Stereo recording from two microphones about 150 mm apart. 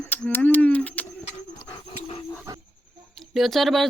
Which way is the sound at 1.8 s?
35° left (ahead or behind).